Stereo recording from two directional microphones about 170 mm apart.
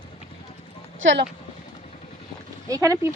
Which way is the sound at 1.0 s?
90° right.